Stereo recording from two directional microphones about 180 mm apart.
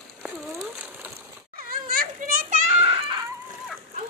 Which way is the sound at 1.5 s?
55° right (ahead or behind).